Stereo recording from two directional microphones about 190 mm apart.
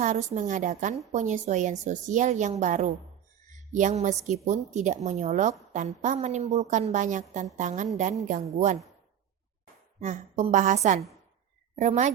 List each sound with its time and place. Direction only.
0.0 s a woman's voice: 35° right (ahead or behind)
10.0 s a woman's voice: 40° right (ahead or behind)